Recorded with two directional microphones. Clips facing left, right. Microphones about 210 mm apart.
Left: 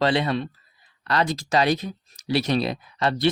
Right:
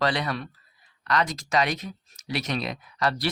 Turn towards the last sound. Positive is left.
turn(degrees=25)  # may be behind; listen again after turning